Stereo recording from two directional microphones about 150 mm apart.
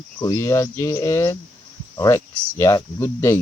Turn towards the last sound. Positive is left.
turn(degrees=20)  # may be behind; listen again after turning